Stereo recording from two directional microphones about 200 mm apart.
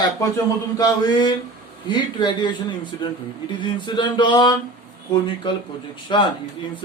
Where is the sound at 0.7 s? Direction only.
20° left (ahead or behind).